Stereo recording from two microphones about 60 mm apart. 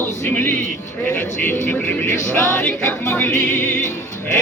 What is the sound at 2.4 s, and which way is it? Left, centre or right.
Music, left.